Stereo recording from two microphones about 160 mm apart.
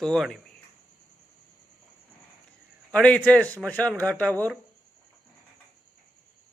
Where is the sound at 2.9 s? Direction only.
10° left (ahead or behind).